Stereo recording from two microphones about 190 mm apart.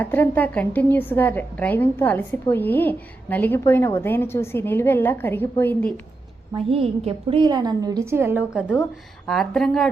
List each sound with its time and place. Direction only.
0.0 s a woman's voice: 10° left (ahead or behind)
6.7 s a woman's voice: 30° right (ahead or behind); by 9.9 s 5° left (ahead or behind)